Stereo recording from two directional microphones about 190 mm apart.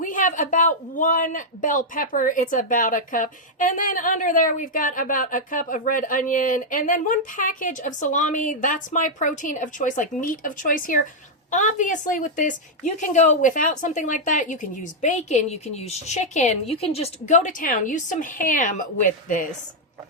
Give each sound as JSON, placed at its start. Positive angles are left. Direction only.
{"t": 0.0, "sound": "a man's voice", "side_deg": 45}